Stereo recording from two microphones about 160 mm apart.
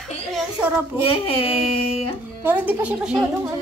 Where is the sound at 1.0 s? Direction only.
35° left (ahead or behind).